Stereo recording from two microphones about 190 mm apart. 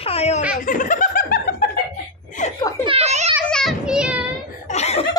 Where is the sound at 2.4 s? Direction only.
40° left (ahead or behind).